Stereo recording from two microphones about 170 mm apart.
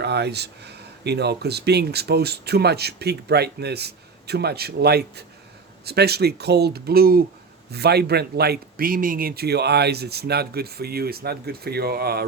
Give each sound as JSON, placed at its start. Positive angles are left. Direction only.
{"t": 0.0, "sound": "speech", "side_deg": -80}
{"t": 7.7, "sound": "speech", "side_deg": -70}